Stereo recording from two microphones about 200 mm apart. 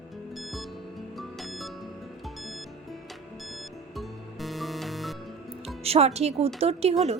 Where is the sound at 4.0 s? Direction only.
Centre (ahead or behind).